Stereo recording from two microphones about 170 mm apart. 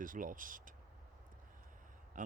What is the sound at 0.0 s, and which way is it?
Speech, 50° right (ahead or behind).